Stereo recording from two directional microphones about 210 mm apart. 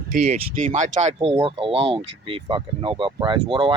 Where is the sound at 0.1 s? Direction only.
35° right (ahead or behind).